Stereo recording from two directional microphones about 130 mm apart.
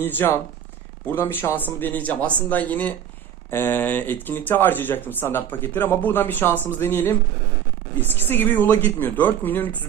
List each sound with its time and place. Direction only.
0.0 s speech: 15° left (ahead or behind)